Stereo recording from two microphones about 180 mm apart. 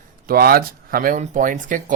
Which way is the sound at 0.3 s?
55° right (ahead or behind).